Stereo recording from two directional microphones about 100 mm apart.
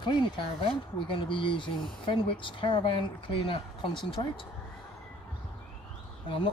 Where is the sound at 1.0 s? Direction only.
60° left (ahead or behind).